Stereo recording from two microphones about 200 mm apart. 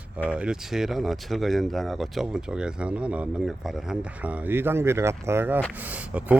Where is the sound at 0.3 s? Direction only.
5° right (ahead or behind).